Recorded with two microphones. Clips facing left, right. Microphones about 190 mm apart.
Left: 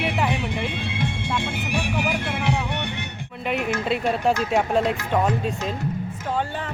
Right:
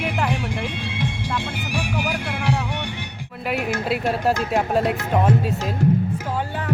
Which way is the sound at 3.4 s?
5° right (ahead or behind).